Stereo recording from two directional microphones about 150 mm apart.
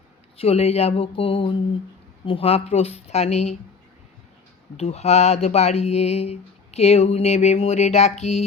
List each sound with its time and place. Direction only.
0.3 s speech: 45° left (ahead or behind)
4.8 s speech: 45° left (ahead or behind)